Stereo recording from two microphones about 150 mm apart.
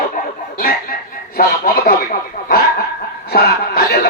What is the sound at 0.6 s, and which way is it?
Chicken, 80° left.